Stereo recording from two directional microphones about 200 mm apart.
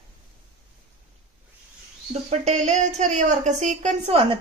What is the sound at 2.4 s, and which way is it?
A woman's voice, 35° right (ahead or behind).